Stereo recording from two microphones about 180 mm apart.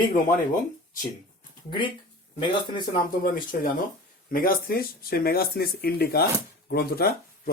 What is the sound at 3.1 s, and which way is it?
Speech, 50° left (ahead or behind).